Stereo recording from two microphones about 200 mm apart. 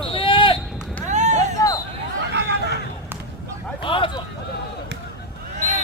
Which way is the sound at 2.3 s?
55° right (ahead or behind).